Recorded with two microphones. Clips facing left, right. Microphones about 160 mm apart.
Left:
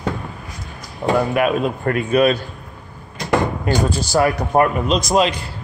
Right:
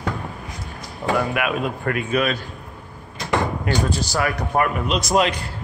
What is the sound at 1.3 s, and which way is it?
Speech, 35° left (ahead or behind).